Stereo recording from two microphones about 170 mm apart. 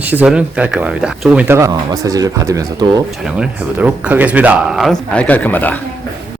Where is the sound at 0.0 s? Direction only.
10° right (ahead or behind).